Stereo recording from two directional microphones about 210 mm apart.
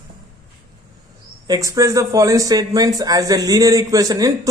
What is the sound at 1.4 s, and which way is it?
Speech, 15° right (ahead or behind).